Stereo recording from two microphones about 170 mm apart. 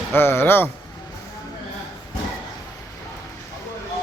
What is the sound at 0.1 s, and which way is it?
Speech, 15° left (ahead or behind).